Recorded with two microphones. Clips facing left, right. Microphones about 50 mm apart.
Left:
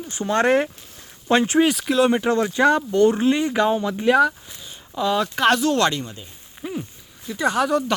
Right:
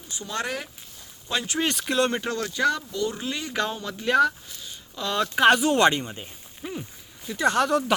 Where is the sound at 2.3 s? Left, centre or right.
Left.